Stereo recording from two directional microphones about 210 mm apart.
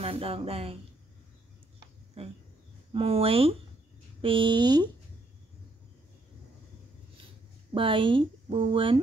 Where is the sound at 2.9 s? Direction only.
25° right (ahead or behind).